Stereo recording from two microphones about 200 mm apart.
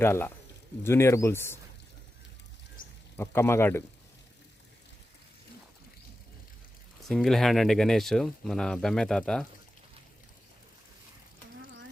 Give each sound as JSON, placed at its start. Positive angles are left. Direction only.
{"t": 0.0, "sound": "speech", "side_deg": 10}
{"t": 2.8, "sound": "a sound", "side_deg": 45}
{"t": 3.2, "sound": "speech", "side_deg": 10}
{"t": 7.1, "sound": "speech", "side_deg": 0}